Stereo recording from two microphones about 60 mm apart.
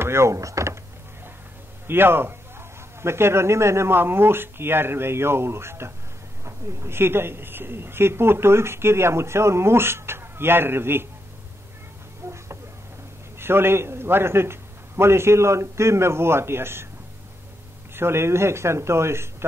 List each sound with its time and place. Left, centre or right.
0.0 s speech: right
1.9 s a woman's voice: right
13.4 s a woman's voice: right
17.9 s a woman's voice: right